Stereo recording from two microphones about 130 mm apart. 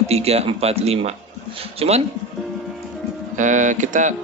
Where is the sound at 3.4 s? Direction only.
75° right (ahead or behind).